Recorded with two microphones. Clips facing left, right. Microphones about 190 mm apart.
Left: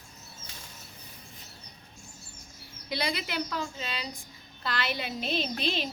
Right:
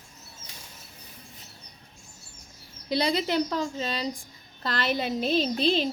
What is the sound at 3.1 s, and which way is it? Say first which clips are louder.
A woman's voice: right 9 dB; 35° right (ahead or behind).